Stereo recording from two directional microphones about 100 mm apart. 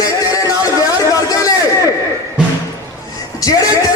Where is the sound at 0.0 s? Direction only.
35° left (ahead or behind).